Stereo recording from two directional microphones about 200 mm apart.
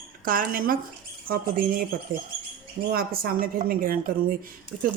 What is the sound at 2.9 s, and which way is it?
Speech, 45° right (ahead or behind).